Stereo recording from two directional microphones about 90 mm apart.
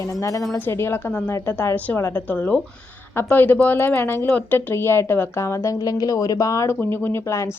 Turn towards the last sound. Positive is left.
turn(degrees=30)  # may be behind; listen again after turning